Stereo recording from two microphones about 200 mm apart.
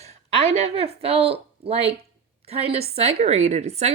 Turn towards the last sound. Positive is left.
turn(degrees=-35)  # may be behind; listen again after turning